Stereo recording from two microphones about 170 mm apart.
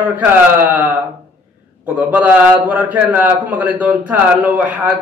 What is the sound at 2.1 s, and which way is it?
A man's voice, 10° right (ahead or behind).